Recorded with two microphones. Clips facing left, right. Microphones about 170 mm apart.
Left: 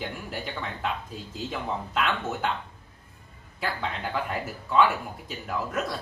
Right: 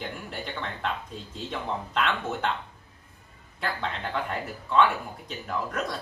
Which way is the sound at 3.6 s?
5° left (ahead or behind).